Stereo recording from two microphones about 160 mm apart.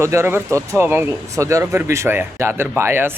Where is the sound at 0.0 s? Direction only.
15° right (ahead or behind).